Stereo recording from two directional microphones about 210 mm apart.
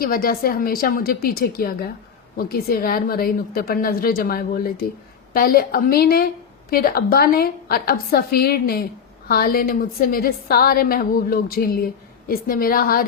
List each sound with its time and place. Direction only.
0.0 s a woman's voice: 45° left (ahead or behind)